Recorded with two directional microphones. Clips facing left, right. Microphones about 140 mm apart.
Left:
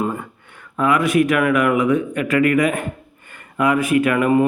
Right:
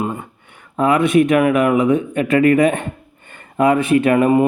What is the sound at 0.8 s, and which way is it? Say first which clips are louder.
Speech: right 3 dB; 25° right (ahead or behind).